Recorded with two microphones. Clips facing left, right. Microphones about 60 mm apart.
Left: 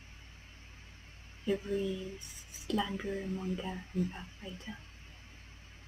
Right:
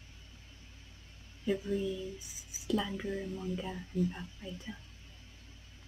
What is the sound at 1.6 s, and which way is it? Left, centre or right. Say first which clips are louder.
Speech: even; left.